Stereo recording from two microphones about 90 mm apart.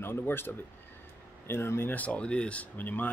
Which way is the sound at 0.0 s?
25° left (ahead or behind).